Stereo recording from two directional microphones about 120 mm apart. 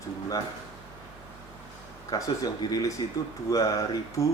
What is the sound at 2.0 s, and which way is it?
Speech, 30° left (ahead or behind).